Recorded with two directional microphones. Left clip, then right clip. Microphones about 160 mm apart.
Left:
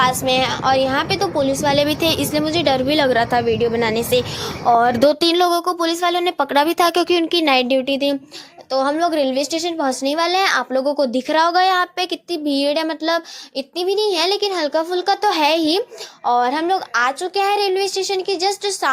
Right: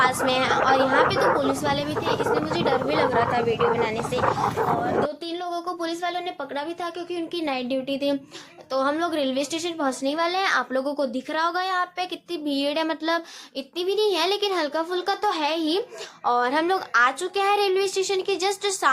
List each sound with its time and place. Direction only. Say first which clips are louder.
0.0 s a woman's voice: left 4 dB; 35° left (ahead or behind)
1.9 s a woman's voice: left 5 dB; 75° left (ahead or behind)
2.6 s a woman's voice: left 5 dB; 90° left; by 8.1 s 45° left (ahead or behind)
8.7 s a woman's voice: left 6 dB; 30° left (ahead or behind)
10.1 s a woman's voice: left 6 dB; 45° left (ahead or behind)
10.8 s a child's voice: left 7 dB; 25° left (ahead or behind)
11.1 s a woman's voice: left 9 dB; 40° left (ahead or behind)
12.5 s a woman's voice: left 6 dB; 35° left (ahead or behind)
16.2 s a child's voice: left 5 dB; 20° left (ahead or behind)